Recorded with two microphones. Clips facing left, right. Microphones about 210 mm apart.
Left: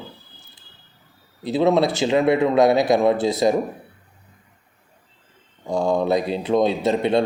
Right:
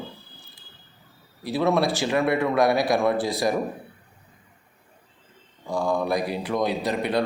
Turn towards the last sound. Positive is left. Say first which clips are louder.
# left 5 dB
turn(degrees=25)  # may be behind; listen again after turning